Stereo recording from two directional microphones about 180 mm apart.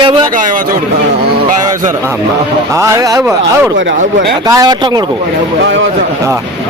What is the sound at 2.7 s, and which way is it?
Speech, 15° right (ahead or behind).